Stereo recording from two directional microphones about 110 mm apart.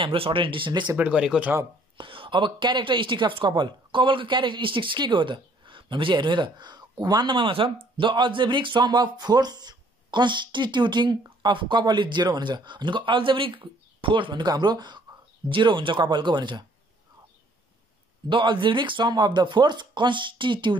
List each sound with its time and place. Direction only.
0.0 s speech: 55° right (ahead or behind)
0.9 s speech: 10° right (ahead or behind)
2.0 s speech: 50° right (ahead or behind)
18.3 s speech: 45° right (ahead or behind)